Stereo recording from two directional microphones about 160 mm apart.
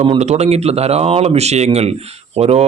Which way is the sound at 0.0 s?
40° right (ahead or behind).